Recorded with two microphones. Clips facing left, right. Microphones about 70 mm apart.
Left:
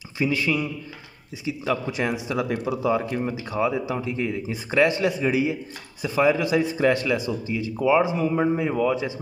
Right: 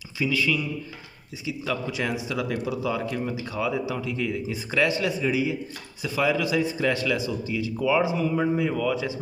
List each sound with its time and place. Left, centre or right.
0.2 s a man's voice: left
1.9 s speech: left
6.0 s a man's voice: left